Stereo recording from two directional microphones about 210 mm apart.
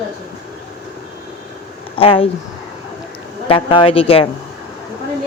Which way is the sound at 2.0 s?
25° left (ahead or behind).